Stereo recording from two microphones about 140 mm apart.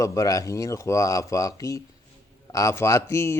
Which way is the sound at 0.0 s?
25° left (ahead or behind).